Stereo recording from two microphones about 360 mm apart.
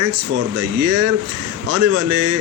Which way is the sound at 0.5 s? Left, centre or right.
Right.